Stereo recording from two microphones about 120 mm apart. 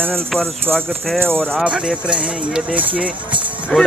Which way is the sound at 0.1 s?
5° left (ahead or behind).